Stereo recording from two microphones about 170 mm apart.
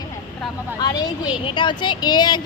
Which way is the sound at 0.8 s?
25° left (ahead or behind).